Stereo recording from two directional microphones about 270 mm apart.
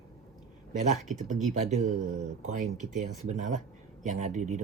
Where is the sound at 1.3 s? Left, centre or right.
Right.